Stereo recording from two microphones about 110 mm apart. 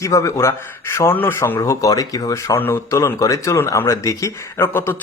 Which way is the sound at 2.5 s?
20° left (ahead or behind).